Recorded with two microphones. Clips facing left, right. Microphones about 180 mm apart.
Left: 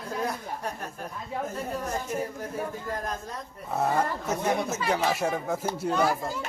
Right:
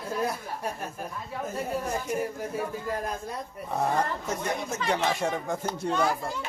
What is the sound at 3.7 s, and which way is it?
Speech, 5° left (ahead or behind).